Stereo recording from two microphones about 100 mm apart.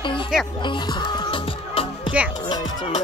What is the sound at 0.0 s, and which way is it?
Music, 55° left (ahead or behind).